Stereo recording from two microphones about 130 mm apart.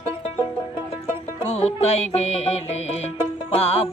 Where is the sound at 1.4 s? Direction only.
50° left (ahead or behind).